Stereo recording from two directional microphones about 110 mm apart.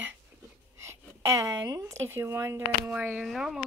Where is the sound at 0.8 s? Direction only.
25° right (ahead or behind).